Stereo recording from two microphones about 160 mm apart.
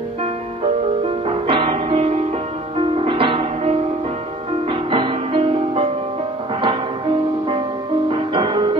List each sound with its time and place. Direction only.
1.0 s music: 35° right (ahead or behind)
8.1 s music: 30° right (ahead or behind)